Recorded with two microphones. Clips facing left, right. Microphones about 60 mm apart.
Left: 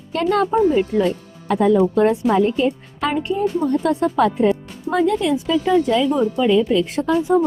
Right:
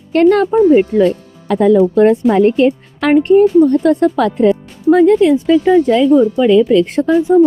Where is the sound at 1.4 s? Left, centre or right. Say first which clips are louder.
Right 5 dB; right.